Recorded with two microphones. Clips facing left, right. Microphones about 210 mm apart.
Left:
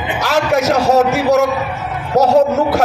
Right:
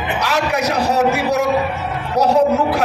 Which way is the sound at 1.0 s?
45° left (ahead or behind).